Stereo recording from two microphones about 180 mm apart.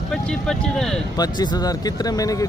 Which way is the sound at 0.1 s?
5° left (ahead or behind).